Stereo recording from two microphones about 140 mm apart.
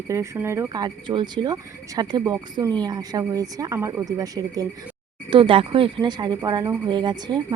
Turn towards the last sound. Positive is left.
turn(degrees=-30)  # may be behind; listen again after turning